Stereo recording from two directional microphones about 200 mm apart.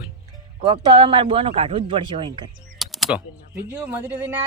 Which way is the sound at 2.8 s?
Centre (ahead or behind).